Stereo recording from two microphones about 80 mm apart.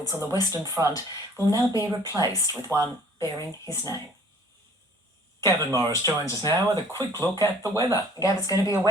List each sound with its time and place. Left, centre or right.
0.0 s speech: left
5.4 s speech: left